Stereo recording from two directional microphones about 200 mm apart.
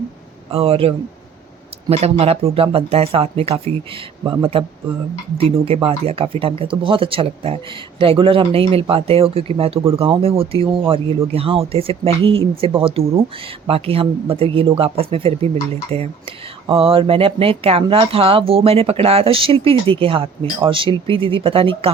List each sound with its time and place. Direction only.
0.5 s speech: 30° right (ahead or behind)